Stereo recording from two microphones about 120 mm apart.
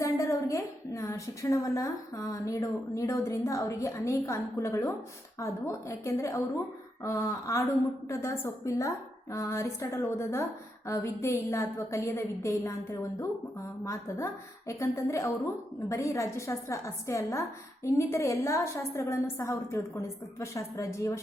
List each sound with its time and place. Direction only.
0.0 s a woman's voice: 25° left (ahead or behind)